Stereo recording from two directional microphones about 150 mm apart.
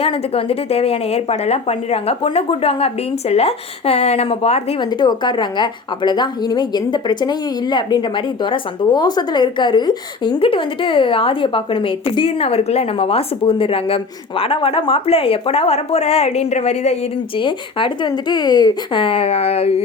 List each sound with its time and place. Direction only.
0.0 s speech: 40° left (ahead or behind)
4.9 s a woman's voice: 30° left (ahead or behind); by 17.4 s 45° left (ahead or behind)
17.4 s a woman's voice: 35° left (ahead or behind)